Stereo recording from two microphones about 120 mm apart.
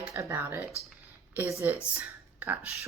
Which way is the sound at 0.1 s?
25° right (ahead or behind).